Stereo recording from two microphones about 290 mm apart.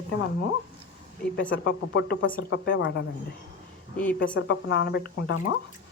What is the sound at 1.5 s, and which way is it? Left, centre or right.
Speech, left.